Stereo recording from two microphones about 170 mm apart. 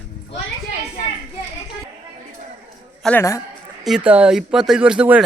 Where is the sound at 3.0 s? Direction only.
15° left (ahead or behind).